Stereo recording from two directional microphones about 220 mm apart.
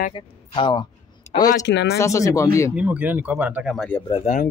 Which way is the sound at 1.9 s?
15° left (ahead or behind).